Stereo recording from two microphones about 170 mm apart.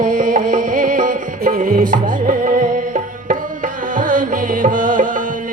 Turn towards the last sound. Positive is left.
turn(degrees=-50)  # may be behind; listen again after turning